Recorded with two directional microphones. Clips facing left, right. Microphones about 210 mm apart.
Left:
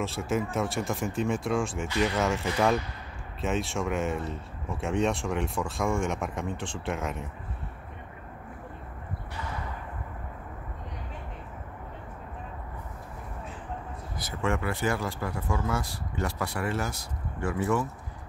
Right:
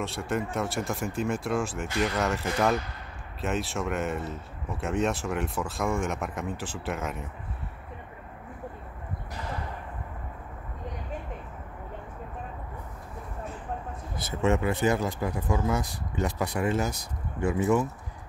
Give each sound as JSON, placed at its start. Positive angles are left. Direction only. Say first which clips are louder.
{"t": 0.0, "sound": "speech", "louder": "left 1 dB", "side_deg": 0}
{"t": 14.1, "sound": "speech", "louder": "right 4 dB", "side_deg": -25}